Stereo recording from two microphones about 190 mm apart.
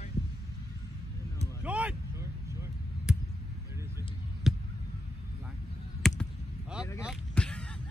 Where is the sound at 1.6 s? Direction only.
5° right (ahead or behind).